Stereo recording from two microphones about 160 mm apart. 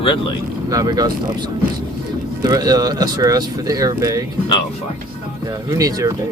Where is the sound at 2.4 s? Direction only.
25° right (ahead or behind).